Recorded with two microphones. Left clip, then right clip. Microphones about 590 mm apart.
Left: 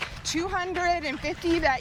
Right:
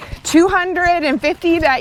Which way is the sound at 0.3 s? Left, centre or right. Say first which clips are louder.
Right 16 dB; right.